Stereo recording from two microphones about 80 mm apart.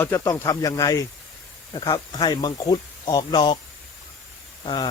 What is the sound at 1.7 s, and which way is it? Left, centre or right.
Speech, left.